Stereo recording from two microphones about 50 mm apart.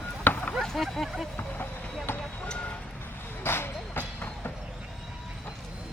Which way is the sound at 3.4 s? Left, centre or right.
Left.